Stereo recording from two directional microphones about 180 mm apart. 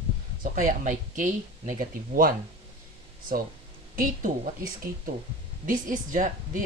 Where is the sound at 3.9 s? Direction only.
45° right (ahead or behind).